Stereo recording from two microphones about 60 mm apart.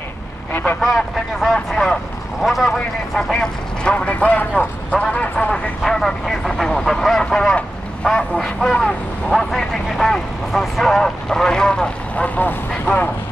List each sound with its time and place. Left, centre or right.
0.5 s vehicle: left
0.7 s speech: centre
3.2 s speech: centre
5.9 s speech: centre
12.4 s speech: left